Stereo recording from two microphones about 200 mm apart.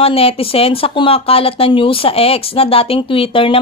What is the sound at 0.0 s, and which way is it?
Speech, 30° left (ahead or behind).